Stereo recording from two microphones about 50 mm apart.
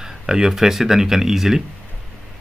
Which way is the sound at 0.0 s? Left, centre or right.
Centre.